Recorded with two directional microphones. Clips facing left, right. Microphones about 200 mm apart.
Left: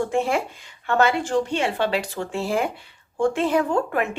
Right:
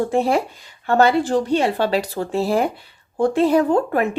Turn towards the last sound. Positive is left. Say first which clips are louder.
# right 5 dB
turn(degrees=-35)  # may be behind; listen again after turning